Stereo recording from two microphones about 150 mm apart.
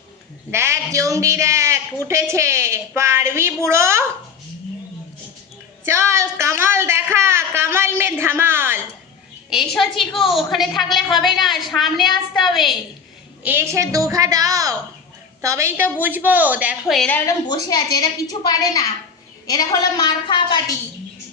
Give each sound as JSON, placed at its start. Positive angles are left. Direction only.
{"t": 0.5, "sound": "a woman's voice", "side_deg": -15}
{"t": 5.8, "sound": "a sound", "side_deg": -20}
{"t": 9.5, "sound": "a woman's voice", "side_deg": 0}
{"t": 13.4, "sound": "a woman's voice", "side_deg": -15}
{"t": 17.1, "sound": "a woman's voice", "side_deg": 10}
{"t": 17.5, "sound": "a woman's voice", "side_deg": 25}